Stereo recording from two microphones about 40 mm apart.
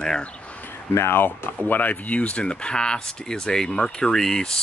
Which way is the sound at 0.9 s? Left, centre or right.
Left.